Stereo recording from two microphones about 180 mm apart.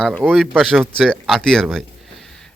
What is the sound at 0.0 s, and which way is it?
A man's voice, 5° left (ahead or behind).